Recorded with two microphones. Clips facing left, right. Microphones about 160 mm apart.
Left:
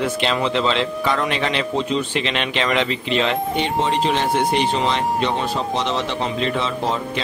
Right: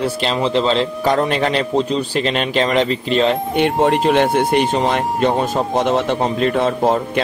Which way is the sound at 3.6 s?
55° right (ahead or behind).